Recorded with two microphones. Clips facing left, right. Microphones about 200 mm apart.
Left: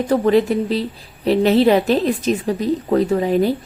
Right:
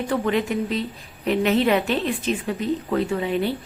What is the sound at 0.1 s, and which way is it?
Speech, 35° left (ahead or behind).